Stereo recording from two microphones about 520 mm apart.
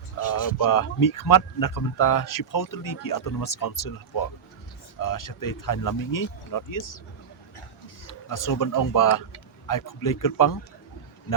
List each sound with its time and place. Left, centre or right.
0.3 s speech: left
8.0 s speech: left